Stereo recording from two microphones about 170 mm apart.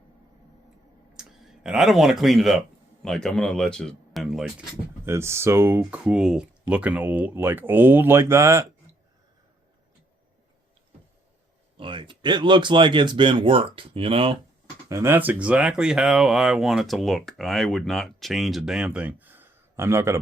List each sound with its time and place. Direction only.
1.1 s speech: 5° right (ahead or behind)
5.0 s speech: 15° right (ahead or behind)
11.8 s speech: 30° right (ahead or behind)
14.8 s speech: 15° right (ahead or behind)